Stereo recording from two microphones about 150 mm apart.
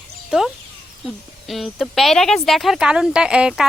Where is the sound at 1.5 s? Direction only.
Centre (ahead or behind).